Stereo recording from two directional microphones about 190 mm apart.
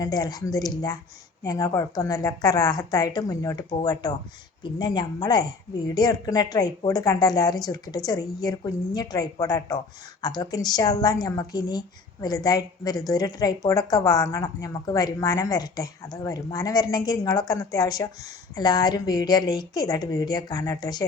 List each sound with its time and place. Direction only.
0.0 s speech: 20° left (ahead or behind)